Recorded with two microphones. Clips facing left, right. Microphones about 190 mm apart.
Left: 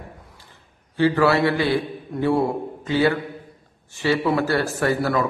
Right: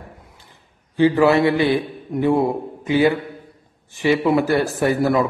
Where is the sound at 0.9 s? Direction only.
20° right (ahead or behind).